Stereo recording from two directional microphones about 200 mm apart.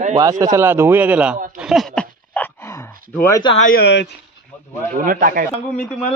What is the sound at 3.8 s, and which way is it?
Speech, 55° left (ahead or behind).